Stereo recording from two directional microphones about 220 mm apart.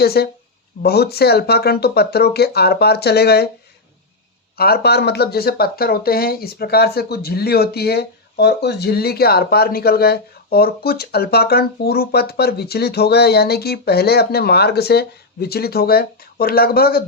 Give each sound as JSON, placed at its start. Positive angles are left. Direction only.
{"t": 0.0, "sound": "speech", "side_deg": 45}
{"t": 4.5, "sound": "speech", "side_deg": 45}